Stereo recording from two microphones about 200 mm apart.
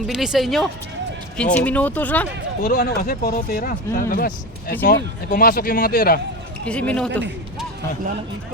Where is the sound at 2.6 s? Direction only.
50° left (ahead or behind).